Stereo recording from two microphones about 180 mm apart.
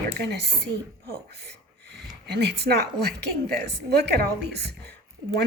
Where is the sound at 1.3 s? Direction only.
65° right (ahead or behind).